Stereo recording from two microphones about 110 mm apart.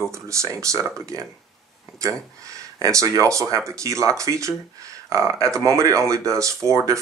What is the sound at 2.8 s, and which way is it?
Speech, 30° right (ahead or behind).